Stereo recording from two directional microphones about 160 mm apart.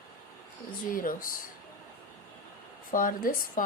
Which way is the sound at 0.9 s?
60° left (ahead or behind).